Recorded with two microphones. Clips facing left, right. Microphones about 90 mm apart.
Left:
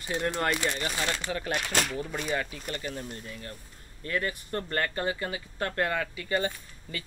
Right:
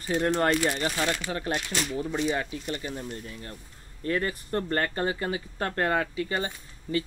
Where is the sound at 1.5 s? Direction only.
55° left (ahead or behind).